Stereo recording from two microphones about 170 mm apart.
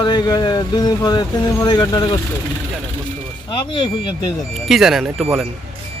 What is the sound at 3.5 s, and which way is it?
Speech, 25° left (ahead or behind).